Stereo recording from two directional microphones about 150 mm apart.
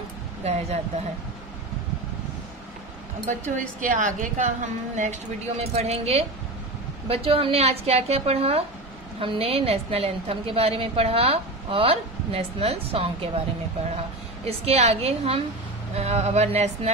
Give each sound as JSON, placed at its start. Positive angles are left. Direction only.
{"t": 0.4, "sound": "a woman's voice", "side_deg": -45}
{"t": 3.3, "sound": "a woman's voice", "side_deg": -60}
{"t": 5.6, "sound": "a woman's voice", "side_deg": -45}
{"t": 14.4, "sound": "a woman's voice", "side_deg": -45}